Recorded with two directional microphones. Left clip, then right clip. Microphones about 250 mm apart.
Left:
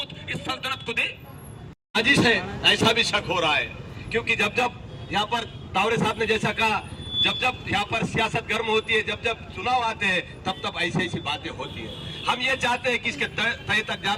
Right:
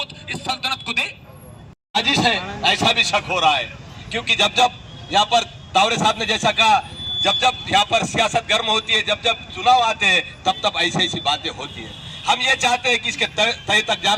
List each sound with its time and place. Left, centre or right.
0.0 s vehicle: right
2.0 s a man's voice: centre